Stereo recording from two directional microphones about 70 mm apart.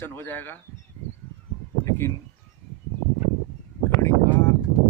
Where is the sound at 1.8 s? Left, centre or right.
Left.